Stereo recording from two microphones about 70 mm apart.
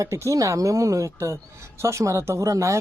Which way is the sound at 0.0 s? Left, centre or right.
Right.